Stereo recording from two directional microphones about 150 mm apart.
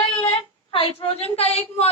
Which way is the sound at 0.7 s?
35° left (ahead or behind).